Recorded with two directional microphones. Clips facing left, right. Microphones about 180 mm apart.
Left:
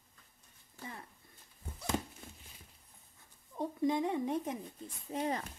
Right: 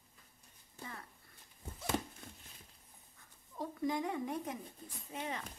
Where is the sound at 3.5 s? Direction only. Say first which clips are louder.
Left 4 dB; 20° left (ahead or behind).